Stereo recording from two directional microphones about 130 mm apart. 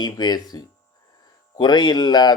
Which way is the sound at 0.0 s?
30° left (ahead or behind).